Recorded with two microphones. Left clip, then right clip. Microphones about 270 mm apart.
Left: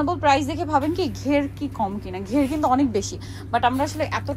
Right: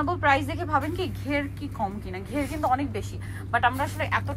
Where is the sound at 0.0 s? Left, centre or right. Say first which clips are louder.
Left 4 dB; centre.